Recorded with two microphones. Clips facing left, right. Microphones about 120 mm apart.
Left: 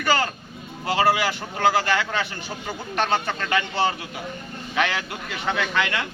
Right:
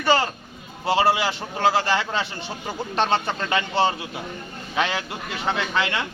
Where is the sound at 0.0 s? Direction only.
25° right (ahead or behind).